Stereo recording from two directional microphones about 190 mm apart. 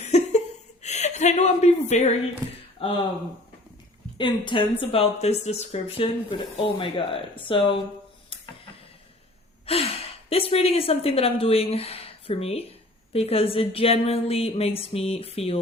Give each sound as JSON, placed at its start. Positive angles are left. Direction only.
{"t": 0.0, "sound": "chuckle", "side_deg": 35}
{"t": 2.7, "sound": "speech", "side_deg": 30}
{"t": 4.2, "sound": "speech", "side_deg": 25}
{"t": 9.6, "sound": "a woman's voice", "side_deg": 30}